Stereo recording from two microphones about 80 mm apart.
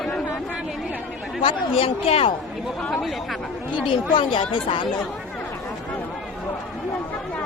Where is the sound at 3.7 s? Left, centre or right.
Left.